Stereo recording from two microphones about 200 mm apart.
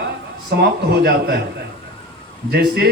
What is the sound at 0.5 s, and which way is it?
Speech, 55° right (ahead or behind).